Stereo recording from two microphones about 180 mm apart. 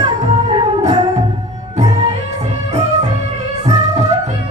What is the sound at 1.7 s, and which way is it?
Music, 40° right (ahead or behind).